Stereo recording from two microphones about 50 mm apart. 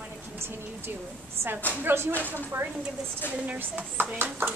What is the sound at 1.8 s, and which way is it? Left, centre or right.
Speech, right.